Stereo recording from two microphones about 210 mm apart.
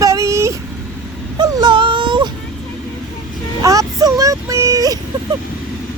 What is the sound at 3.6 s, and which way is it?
Speech, 15° right (ahead or behind).